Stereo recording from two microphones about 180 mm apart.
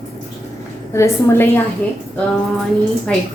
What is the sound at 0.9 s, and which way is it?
Speech, 15° left (ahead or behind).